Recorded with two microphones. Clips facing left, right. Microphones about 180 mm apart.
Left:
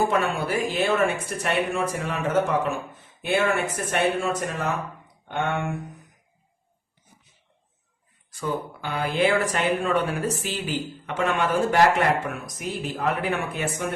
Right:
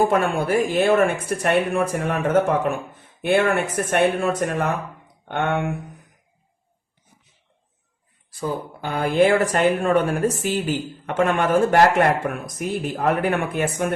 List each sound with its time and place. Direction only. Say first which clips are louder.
0.0 s speech: right 4 dB; 50° right (ahead or behind)
8.3 s speech: right 2 dB; 35° right (ahead or behind); by 13.8 s 55° right (ahead or behind)